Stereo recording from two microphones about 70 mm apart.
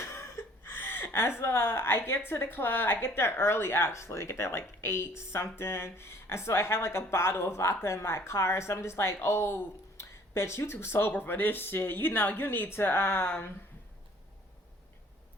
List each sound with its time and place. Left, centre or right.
0.0 s speech: left